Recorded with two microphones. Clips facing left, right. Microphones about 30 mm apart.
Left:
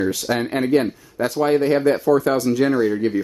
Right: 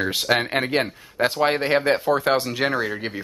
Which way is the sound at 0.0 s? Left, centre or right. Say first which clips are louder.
Even; right.